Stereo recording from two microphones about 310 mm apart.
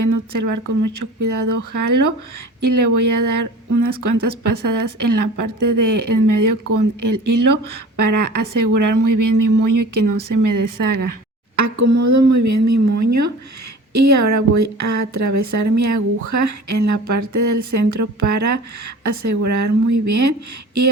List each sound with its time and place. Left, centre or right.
0.0 s speech: right
11.5 s a woman's voice: right